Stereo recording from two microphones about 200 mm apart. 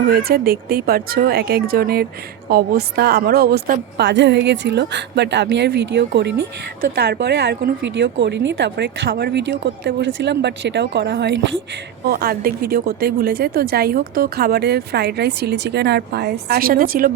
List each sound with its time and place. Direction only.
0.1 s speech: 50° right (ahead or behind)